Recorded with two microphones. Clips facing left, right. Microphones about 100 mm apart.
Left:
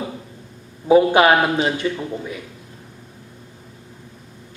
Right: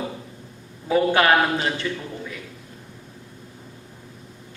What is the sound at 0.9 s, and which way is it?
A man's voice, 20° left (ahead or behind).